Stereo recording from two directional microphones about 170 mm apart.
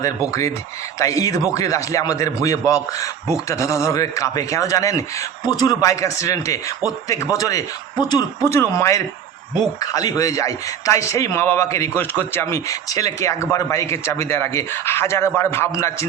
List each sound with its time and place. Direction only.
0.9 s a man's voice: 20° left (ahead or behind)